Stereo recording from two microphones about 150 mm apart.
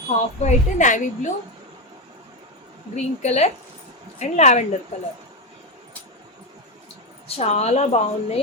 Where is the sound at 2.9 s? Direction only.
50° left (ahead or behind).